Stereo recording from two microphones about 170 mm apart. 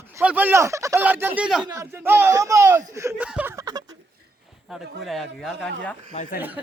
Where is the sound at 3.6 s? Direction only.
25° right (ahead or behind).